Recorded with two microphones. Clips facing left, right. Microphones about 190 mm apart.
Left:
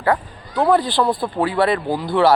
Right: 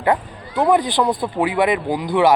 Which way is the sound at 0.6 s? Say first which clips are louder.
Even; 20° right (ahead or behind).